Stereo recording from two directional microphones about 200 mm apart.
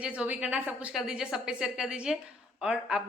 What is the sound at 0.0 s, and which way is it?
A woman's voice, 5° right (ahead or behind).